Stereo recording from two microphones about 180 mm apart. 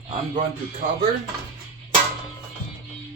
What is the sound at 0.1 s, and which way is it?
Speech, 45° right (ahead or behind).